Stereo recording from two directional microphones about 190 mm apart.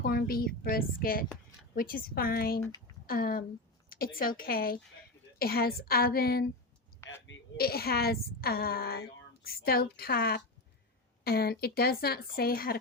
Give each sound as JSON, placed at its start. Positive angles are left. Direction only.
{"t": 0.0, "sound": "a woman's voice", "side_deg": 50}
{"t": 2.6, "sound": "speech", "side_deg": 20}
{"t": 3.1, "sound": "a woman's voice", "side_deg": 50}